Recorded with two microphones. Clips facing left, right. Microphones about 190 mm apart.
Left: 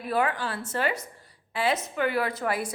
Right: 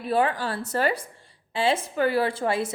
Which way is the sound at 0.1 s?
30° right (ahead or behind).